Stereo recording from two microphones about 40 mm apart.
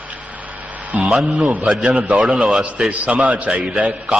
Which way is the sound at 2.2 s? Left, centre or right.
Right.